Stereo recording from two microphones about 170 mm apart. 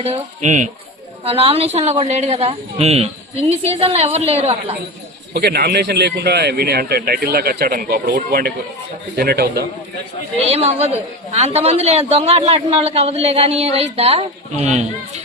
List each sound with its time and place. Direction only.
0.0 s speech: 40° right (ahead or behind)
1.2 s a man's voice: 35° right (ahead or behind)
5.3 s a man's voice: 70° right (ahead or behind)
10.4 s a man's voice: 40° right (ahead or behind)